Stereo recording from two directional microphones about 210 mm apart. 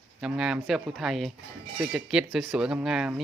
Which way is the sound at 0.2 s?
5° right (ahead or behind).